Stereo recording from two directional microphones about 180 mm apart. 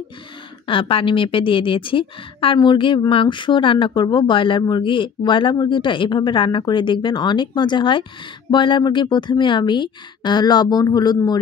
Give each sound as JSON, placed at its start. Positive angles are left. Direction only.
{"t": 0.7, "sound": "a woman's voice", "side_deg": 30}